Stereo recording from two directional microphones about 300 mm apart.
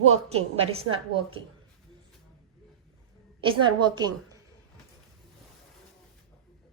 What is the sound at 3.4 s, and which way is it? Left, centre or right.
Speech, centre.